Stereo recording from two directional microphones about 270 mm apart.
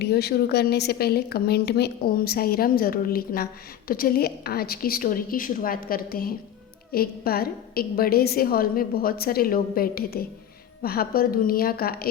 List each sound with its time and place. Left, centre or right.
0.0 s speech: left